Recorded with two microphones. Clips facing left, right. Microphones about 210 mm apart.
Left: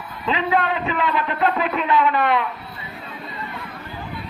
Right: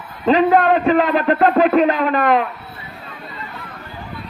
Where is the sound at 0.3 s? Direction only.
45° right (ahead or behind).